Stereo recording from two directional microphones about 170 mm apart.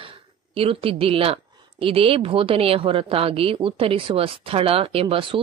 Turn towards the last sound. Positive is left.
turn(degrees=-30)  # may be behind; listen again after turning